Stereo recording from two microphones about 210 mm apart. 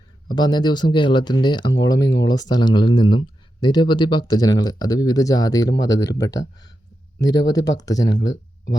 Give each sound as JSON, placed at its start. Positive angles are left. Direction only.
{"t": 0.3, "sound": "speech", "side_deg": 20}